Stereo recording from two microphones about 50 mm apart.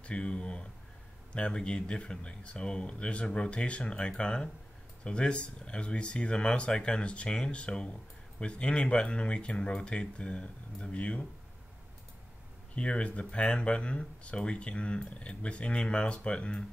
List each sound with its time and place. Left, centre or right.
0.0 s speech: left
12.7 s speech: left